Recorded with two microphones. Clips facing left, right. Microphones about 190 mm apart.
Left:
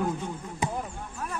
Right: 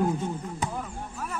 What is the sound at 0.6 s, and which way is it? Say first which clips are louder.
Basketball bounce: left 3 dB; 20° left (ahead or behind).